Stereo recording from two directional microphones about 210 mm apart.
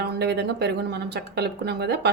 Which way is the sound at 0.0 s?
50° right (ahead or behind).